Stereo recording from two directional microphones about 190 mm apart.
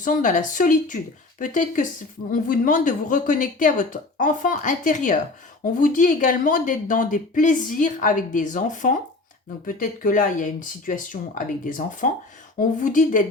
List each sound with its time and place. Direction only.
0.0 s speech: 45° left (ahead or behind)